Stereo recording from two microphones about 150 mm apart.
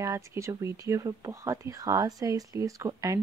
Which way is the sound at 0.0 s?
20° right (ahead or behind).